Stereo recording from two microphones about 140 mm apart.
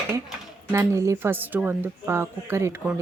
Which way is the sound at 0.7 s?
20° right (ahead or behind).